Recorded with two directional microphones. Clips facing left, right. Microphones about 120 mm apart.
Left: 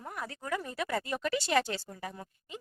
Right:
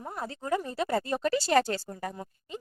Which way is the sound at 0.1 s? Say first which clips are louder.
Right 5 dB; 30° right (ahead or behind).